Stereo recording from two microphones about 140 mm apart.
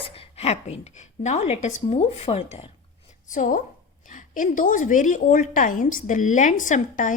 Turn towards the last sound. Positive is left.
turn(degrees=65)  # may be behind; listen again after turning